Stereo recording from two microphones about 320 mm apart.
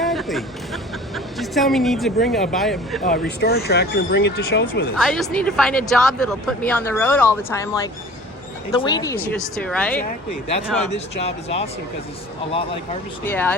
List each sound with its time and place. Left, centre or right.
0.0 s speech: centre
3.0 s speech: left
4.9 s speech: centre
11.3 s speech: centre
13.2 s speech: centre